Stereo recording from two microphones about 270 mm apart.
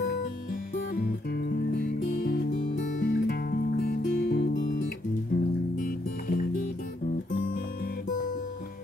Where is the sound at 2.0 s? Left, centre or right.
Left.